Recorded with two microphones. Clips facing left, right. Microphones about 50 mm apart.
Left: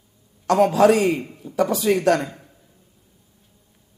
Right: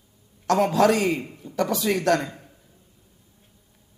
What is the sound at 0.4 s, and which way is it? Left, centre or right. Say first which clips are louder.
Speech: left 4 dB; left.